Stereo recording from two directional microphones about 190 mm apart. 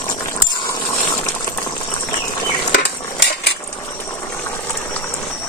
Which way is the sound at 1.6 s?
20° left (ahead or behind).